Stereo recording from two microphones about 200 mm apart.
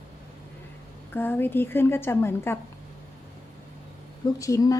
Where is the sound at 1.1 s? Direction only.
10° left (ahead or behind).